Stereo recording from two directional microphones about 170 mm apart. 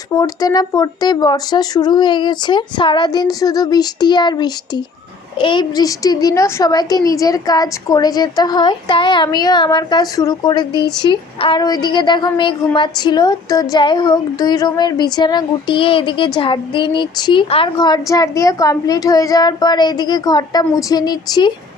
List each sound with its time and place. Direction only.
0.1 s a woman's voice: 20° left (ahead or behind)